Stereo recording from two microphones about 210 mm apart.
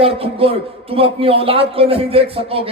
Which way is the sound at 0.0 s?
25° right (ahead or behind).